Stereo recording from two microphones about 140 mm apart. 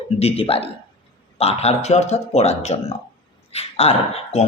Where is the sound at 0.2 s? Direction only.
45° left (ahead or behind).